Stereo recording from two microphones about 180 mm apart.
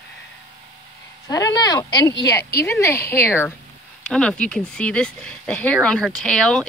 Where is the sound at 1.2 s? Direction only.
20° left (ahead or behind).